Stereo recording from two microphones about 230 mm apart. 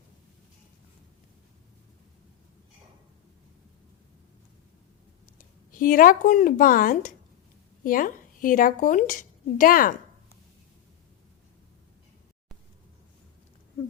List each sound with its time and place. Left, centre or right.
5.4 s a woman's voice: left